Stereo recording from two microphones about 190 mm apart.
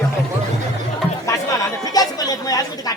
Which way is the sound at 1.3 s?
20° left (ahead or behind).